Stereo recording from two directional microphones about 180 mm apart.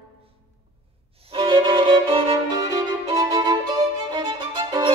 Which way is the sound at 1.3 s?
25° right (ahead or behind).